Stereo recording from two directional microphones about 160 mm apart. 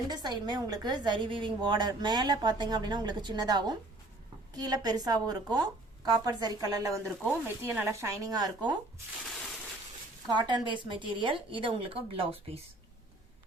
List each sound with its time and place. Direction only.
0.1 s a woman's voice: 25° right (ahead or behind)
10.3 s a woman's voice: 30° right (ahead or behind)